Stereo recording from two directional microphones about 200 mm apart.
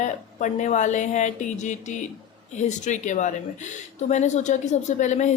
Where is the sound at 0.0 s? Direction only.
40° left (ahead or behind).